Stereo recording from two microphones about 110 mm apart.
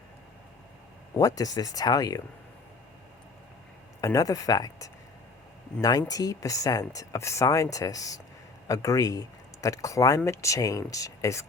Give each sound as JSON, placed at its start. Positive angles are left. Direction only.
{"t": 1.1, "sound": "speech", "side_deg": 35}
{"t": 4.0, "sound": "speech", "side_deg": 35}